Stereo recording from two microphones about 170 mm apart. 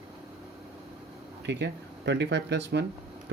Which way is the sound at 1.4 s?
90° right.